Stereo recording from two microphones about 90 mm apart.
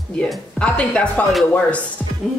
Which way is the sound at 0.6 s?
10° left (ahead or behind).